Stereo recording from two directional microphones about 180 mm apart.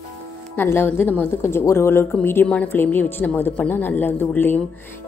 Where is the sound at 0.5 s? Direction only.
10° left (ahead or behind).